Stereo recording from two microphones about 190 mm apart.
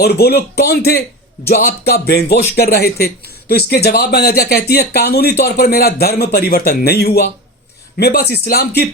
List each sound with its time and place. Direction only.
0.0 s speech: 55° left (ahead or behind)